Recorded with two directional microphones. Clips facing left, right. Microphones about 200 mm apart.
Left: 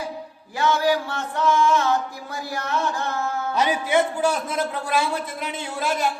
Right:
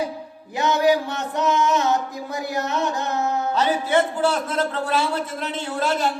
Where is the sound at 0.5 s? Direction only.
20° right (ahead or behind).